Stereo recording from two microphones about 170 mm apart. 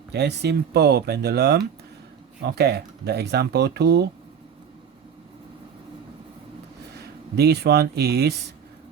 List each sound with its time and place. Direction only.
0.1 s speech: 80° right
6.9 s speech: 75° right (ahead or behind)